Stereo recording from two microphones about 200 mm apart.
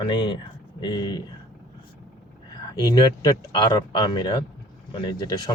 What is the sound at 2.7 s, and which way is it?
Speech, 20° left (ahead or behind).